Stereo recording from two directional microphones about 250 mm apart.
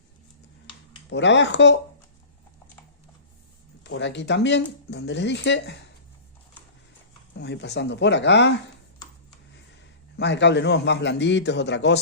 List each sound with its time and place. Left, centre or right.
1.1 s speech: left
3.8 s speech: left
7.3 s speech: left
10.2 s speech: left